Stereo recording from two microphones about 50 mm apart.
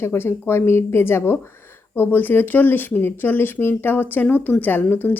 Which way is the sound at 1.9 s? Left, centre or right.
Left.